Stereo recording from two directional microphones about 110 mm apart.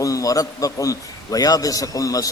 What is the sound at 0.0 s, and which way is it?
A man's voice, 30° left (ahead or behind).